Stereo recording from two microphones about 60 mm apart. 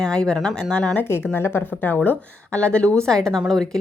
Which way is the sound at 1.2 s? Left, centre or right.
Left.